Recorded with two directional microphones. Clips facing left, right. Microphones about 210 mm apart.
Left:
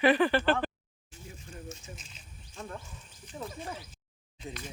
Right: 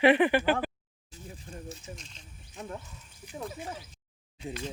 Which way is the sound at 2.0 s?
5° left (ahead or behind).